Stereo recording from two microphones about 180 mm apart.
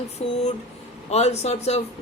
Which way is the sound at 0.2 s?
35° left (ahead or behind).